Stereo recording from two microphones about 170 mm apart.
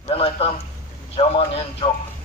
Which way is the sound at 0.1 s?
35° left (ahead or behind).